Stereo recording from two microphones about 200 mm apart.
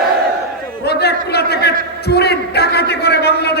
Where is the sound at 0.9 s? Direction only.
55° left (ahead or behind).